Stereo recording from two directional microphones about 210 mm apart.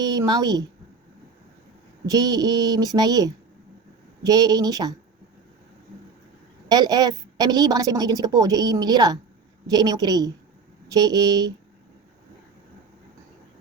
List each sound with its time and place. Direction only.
0.0 s a woman's voice: 20° right (ahead or behind)
2.0 s a woman's voice: 15° right (ahead or behind)
6.7 s a woman's voice: 20° right (ahead or behind)